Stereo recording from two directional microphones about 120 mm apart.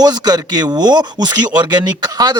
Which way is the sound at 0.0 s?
35° right (ahead or behind).